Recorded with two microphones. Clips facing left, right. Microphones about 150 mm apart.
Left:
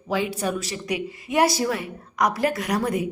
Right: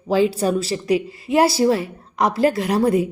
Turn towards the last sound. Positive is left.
turn(degrees=-30)  # may be behind; listen again after turning